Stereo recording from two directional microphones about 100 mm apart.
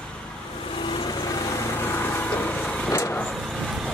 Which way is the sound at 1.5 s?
25° left (ahead or behind).